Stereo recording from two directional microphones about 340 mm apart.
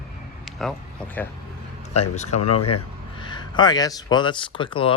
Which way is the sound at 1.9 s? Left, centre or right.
Centre.